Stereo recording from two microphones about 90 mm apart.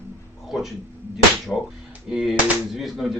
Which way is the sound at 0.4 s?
5° right (ahead or behind).